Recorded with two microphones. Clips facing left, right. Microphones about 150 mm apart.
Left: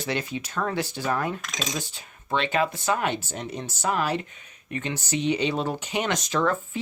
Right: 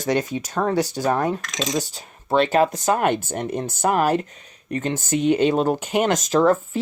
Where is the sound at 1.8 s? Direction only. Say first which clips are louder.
Right 8 dB; 40° right (ahead or behind).